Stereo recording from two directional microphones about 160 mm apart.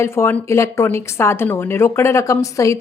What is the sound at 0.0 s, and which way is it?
Speech, 15° left (ahead or behind).